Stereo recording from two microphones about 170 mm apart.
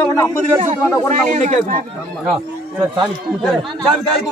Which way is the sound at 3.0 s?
Centre (ahead or behind).